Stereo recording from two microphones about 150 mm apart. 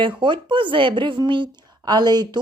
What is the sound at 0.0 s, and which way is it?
Speech, 30° right (ahead or behind).